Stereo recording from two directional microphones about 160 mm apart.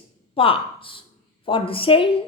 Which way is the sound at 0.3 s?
35° left (ahead or behind).